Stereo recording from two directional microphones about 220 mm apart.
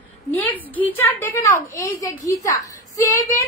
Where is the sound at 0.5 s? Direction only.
5° left (ahead or behind).